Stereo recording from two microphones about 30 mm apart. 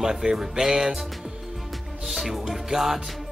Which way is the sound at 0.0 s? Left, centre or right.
Centre.